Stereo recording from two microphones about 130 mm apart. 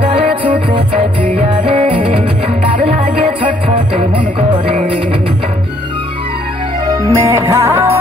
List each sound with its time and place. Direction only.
0.0 s music: 45° right (ahead or behind)
1.7 s music: 45° right (ahead or behind)
6.9 s music: 25° right (ahead or behind)